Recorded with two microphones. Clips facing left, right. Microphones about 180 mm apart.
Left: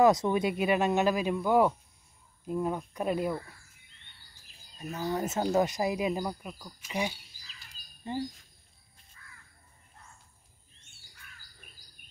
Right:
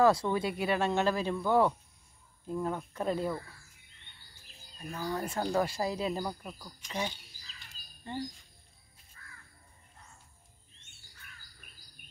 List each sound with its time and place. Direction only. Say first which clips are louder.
0.0 s speech: left 2 dB; 20° left (ahead or behind)
4.9 s speech: left 3 dB; 20° left (ahead or behind)
8.0 s speech: left 4 dB; 20° left (ahead or behind)